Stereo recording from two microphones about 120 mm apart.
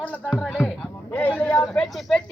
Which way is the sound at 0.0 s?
10° left (ahead or behind).